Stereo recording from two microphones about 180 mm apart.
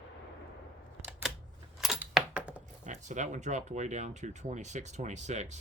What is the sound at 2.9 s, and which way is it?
Speech, 40° right (ahead or behind).